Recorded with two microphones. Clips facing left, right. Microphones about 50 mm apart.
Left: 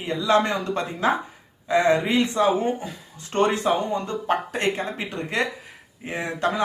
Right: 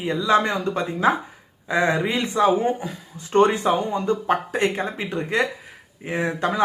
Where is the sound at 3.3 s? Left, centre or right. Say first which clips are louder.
Right 4 dB; right.